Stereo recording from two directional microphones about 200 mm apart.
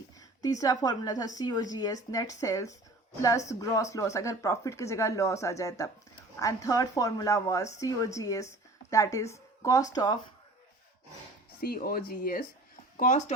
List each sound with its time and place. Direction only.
0.4 s speech: 15° left (ahead or behind)
11.6 s speech: 45° left (ahead or behind)